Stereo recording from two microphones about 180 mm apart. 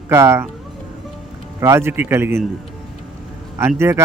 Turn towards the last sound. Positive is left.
turn(degrees=-15)  # may be behind; listen again after turning